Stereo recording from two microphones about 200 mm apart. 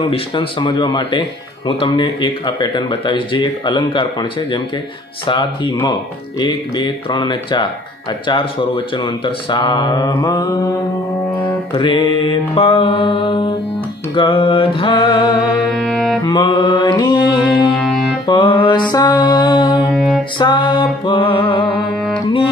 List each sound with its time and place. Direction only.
0.1 s speech: 25° left (ahead or behind)
14.1 s mantra: 25° left (ahead or behind)
15.7 s music: 5° left (ahead or behind)
16.3 s music: 20° left (ahead or behind)
17.7 s music: 5° left (ahead or behind)
18.2 s music: 25° left (ahead or behind)
19.9 s music: centre (ahead or behind)
20.3 s music: 25° left (ahead or behind)